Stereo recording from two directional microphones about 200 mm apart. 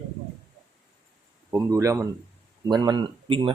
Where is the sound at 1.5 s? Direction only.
15° right (ahead or behind).